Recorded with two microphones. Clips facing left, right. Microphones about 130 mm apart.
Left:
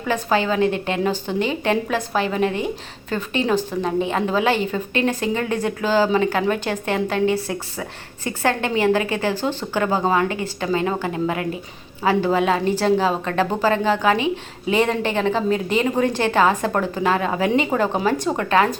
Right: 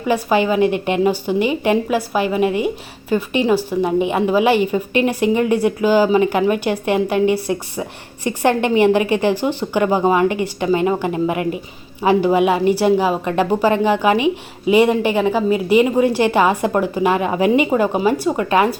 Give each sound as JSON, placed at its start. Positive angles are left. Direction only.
{"t": 0.1, "sound": "a woman's voice", "side_deg": -15}